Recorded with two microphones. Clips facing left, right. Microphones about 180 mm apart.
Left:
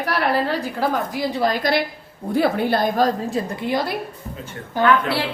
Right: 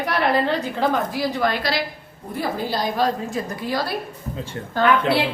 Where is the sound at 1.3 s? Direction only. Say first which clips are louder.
Left 3 dB; 40° left (ahead or behind).